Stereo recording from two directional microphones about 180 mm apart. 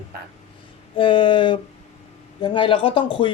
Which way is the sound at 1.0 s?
25° left (ahead or behind).